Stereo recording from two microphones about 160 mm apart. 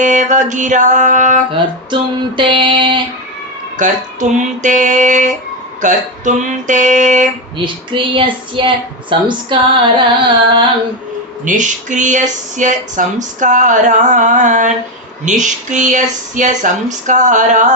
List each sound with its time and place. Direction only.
0.0 s speech: 50° right (ahead or behind)
1.5 s a woman's voice: 30° right (ahead or behind)
3.8 s speech: 50° right (ahead or behind)
7.6 s a woman's voice: 30° right (ahead or behind)
11.4 s speech: 50° right (ahead or behind)